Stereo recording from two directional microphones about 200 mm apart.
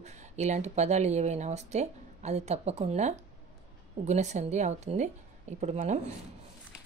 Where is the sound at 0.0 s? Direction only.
35° right (ahead or behind).